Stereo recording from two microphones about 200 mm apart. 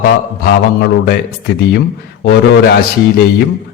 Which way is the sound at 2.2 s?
55° left (ahead or behind).